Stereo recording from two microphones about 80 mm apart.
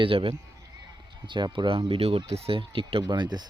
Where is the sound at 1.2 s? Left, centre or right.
Right.